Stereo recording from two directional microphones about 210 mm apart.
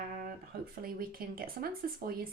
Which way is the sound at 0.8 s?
45° right (ahead or behind).